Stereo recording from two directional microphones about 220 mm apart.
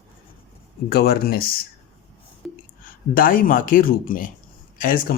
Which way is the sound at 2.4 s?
Centre (ahead or behind).